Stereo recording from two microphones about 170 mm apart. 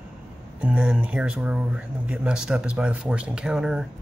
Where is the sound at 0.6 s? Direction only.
5° right (ahead or behind).